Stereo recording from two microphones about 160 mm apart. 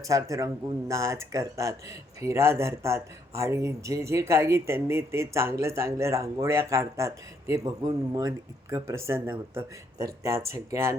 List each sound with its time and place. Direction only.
0.0 s speech: 20° right (ahead or behind)